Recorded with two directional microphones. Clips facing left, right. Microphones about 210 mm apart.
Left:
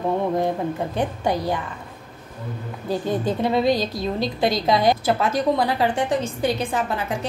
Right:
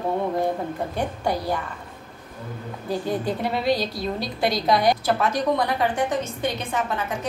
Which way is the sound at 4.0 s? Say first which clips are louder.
Left 3 dB; 25° left (ahead or behind).